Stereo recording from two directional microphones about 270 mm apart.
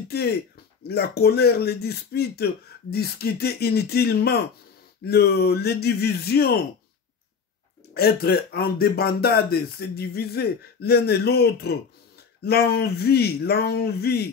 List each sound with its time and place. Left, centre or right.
0.8 s speech: left
7.9 s speech: left